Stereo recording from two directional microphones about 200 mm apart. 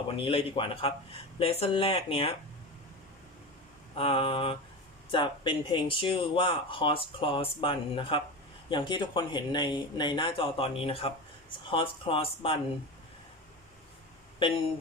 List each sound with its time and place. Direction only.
0.3 s speech: 25° left (ahead or behind)
3.9 s speech: 25° left (ahead or behind)
14.4 s speech: 25° left (ahead or behind)